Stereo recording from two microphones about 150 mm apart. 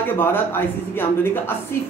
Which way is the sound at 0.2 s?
15° left (ahead or behind).